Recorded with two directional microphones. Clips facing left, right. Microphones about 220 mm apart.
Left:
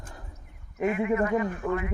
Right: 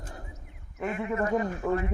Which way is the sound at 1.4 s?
35° right (ahead or behind).